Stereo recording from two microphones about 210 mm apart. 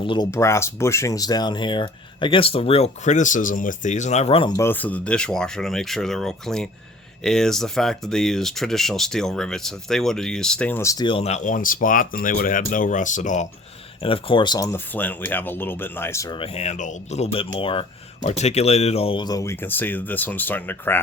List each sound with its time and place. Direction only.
0.0 s speech: 20° left (ahead or behind)
4.5 s speech: 10° left (ahead or behind); by 13.5 s 35° left (ahead or behind)
14.0 s speech: 25° left (ahead or behind); by 21.0 s 10° left (ahead or behind)